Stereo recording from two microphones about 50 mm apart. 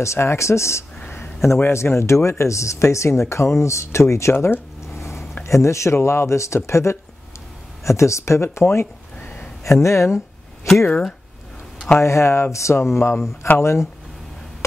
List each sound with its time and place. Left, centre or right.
0.0 s speech: left
5.4 s speech: left
7.8 s speech: left
9.2 s a sound: left
9.7 s speech: left
12.0 s speech: left